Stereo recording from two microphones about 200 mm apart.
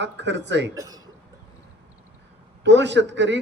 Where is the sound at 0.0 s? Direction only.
60° right (ahead or behind).